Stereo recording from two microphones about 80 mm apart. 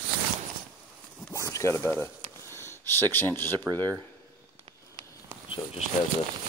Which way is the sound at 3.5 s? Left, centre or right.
Right.